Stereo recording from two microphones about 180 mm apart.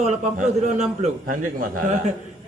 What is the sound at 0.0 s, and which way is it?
A man's voice, 40° right (ahead or behind).